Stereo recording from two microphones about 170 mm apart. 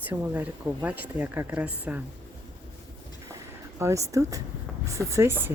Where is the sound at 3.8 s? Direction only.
20° right (ahead or behind).